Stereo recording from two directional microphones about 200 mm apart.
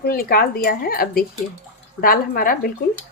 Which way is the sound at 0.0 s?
50° left (ahead or behind).